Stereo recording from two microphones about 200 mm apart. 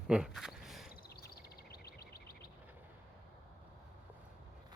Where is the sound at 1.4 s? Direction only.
50° left (ahead or behind).